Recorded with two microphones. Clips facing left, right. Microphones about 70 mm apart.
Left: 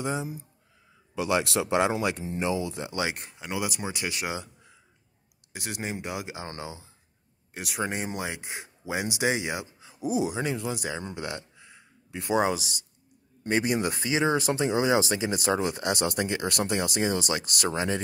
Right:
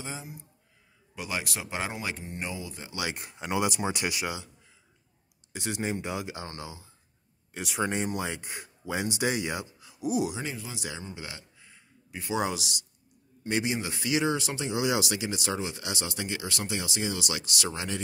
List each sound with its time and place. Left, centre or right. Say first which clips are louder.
0.0 s speech: left 9 dB; left
1.2 s speech: left 9 dB; left
3.3 s speech: right 8 dB; right
5.5 s speech: right 2 dB; centre
6.4 s speech: left 3 dB; left
7.5 s speech: right 1 dB; centre
9.7 s speech: left 1 dB; left
10.4 s speech: left 7 dB; left
11.6 s a sound: left 3 dB; left
12.3 s a man's voice: left 5 dB; left
14.0 s speech: left 1 dB; left